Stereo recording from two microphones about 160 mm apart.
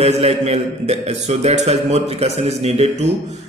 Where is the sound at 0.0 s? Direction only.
40° right (ahead or behind).